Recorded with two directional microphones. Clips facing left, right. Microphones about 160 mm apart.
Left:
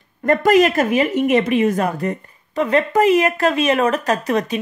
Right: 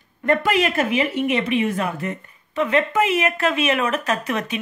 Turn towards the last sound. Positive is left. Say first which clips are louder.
# left 5 dB
turn(degrees=35)  # may be behind; listen again after turning